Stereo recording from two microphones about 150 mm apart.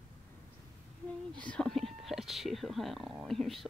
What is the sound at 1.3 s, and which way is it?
Speech, 5° left (ahead or behind).